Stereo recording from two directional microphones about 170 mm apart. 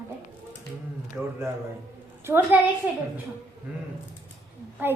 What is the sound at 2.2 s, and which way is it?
Speech, 10° right (ahead or behind).